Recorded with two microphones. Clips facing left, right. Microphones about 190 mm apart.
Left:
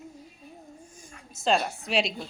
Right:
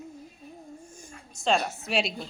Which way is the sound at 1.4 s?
Centre (ahead or behind).